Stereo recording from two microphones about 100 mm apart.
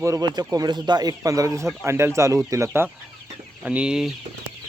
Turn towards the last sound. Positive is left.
turn(degrees=-5)  # may be behind; listen again after turning